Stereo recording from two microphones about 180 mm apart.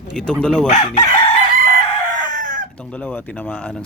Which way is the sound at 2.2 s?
45° right (ahead or behind).